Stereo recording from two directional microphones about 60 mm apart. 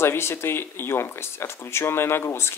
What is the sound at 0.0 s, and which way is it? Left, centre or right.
Speech, left.